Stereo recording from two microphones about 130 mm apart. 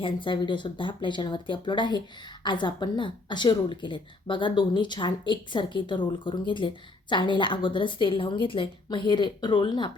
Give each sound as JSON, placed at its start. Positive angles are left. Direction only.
{"t": 0.0, "sound": "a woman's voice", "side_deg": 40}